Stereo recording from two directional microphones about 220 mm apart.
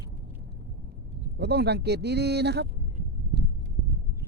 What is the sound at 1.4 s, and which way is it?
Speech, 50° right (ahead or behind).